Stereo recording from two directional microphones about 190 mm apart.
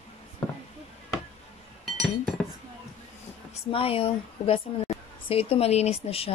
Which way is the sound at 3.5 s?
30° left (ahead or behind).